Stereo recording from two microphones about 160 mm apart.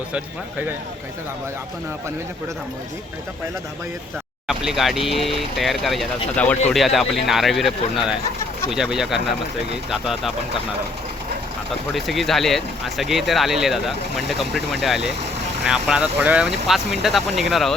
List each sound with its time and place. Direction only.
4.4 s speech: centre (ahead or behind)
11.9 s speech: centre (ahead or behind)